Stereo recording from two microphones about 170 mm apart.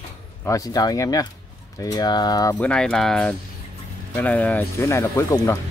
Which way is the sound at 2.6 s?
5° left (ahead or behind).